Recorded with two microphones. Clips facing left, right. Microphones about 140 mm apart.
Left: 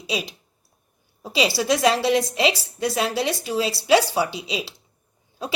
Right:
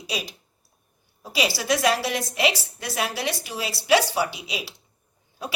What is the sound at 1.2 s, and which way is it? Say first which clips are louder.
A woman's voice: left 4 dB; 25° left (ahead or behind).